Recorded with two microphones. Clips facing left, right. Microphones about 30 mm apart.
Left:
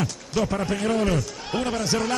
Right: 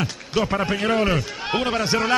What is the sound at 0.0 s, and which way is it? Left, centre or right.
A man's voice, right.